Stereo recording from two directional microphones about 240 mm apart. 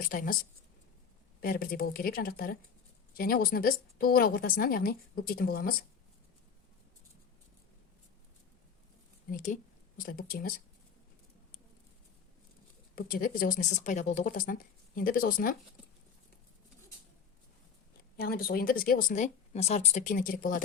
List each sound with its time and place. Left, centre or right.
0.0 s speech: left
1.4 s speech: left
9.3 s speech: left
13.0 s speech: left
18.2 s speech: left